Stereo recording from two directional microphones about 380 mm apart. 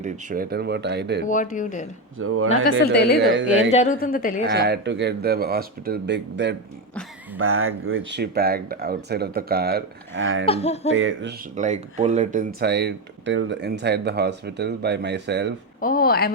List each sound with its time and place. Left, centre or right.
0.0 s speech: right
1.2 s a woman's voice: centre
2.1 s speech: right
2.8 s a woman's voice: left
3.2 s speech: right
3.7 s a woman's voice: centre
4.4 s speech: right
10.4 s laughter: centre
10.9 s speech: right
15.8 s a woman's voice: left